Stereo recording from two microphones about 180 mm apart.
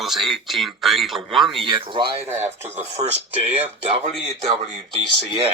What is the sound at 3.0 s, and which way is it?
Speech, 35° right (ahead or behind).